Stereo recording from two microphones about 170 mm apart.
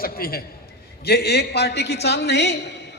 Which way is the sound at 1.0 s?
70° left (ahead or behind).